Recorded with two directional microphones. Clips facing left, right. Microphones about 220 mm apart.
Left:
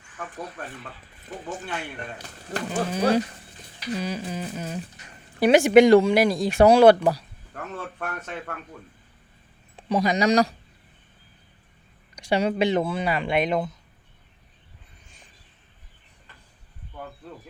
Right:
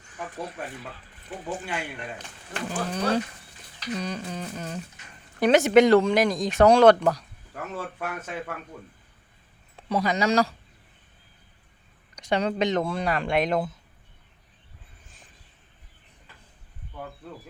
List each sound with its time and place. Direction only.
2.5 s speech: 40° left (ahead or behind)
2.9 s speech: 10° left (ahead or behind)
7.5 s speech: 5° right (ahead or behind)
9.7 s speech: 15° left (ahead or behind)
12.1 s speech: 10° left (ahead or behind)